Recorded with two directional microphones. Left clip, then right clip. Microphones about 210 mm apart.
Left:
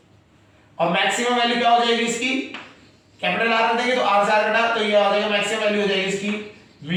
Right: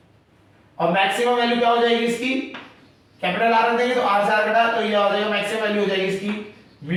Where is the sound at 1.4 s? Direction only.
Centre (ahead or behind).